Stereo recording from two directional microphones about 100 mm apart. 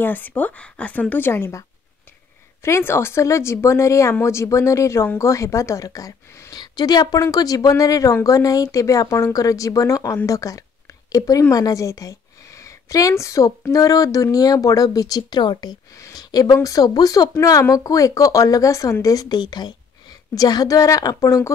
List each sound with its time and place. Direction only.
0.0 s speech: 15° left (ahead or behind)
2.6 s a woman's voice: 25° left (ahead or behind)